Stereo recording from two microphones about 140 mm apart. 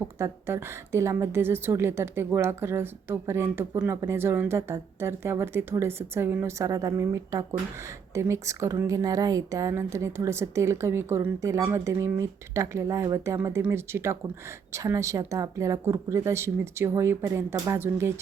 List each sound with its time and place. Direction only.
0.0 s a woman's voice: 20° right (ahead or behind)